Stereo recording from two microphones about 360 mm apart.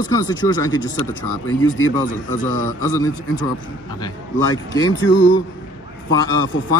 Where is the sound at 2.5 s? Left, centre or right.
Right.